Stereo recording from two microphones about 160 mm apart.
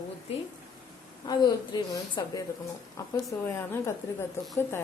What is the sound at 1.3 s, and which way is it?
A woman's voice, 25° left (ahead or behind).